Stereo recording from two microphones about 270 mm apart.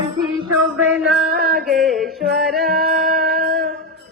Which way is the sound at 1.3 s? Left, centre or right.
Right.